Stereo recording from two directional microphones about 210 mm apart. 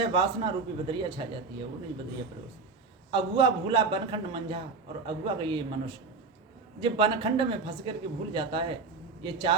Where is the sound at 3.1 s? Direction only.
25° right (ahead or behind).